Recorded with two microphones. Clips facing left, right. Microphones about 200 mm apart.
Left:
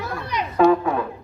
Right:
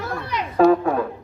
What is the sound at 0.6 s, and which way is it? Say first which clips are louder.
Music: right 1 dB; 45° right (ahead or behind).